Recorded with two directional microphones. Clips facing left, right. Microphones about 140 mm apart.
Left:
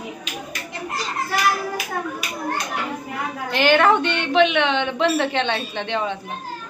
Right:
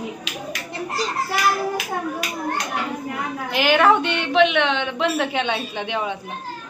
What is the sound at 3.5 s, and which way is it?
A woman's voice, 5° right (ahead or behind).